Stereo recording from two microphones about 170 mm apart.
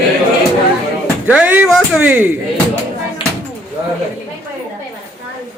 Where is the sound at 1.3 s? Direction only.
5° right (ahead or behind).